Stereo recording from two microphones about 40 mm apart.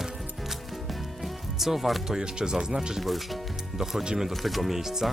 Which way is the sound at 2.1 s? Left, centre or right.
Centre.